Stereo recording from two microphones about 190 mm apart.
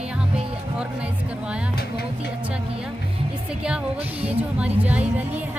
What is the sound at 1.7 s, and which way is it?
Speech, 55° left (ahead or behind).